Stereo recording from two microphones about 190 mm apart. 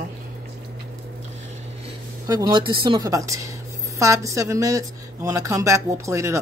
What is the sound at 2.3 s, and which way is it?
Speech, 25° right (ahead or behind).